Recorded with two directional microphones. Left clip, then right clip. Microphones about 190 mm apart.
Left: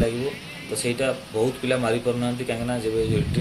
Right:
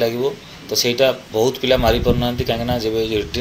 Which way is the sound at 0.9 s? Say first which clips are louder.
Right 8 dB; 15° right (ahead or behind).